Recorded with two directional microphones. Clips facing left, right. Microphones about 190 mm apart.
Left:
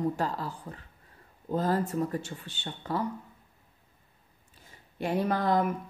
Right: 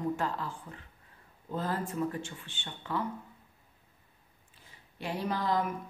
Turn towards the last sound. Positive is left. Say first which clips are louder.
# left 5 dB
turn(degrees=55)  # may be behind; listen again after turning